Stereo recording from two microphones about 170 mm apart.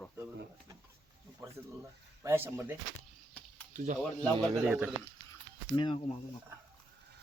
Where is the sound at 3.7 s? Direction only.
45° right (ahead or behind).